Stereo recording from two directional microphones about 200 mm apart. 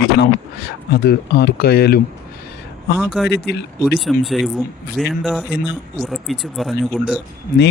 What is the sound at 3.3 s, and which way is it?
Speech, 55° left (ahead or behind).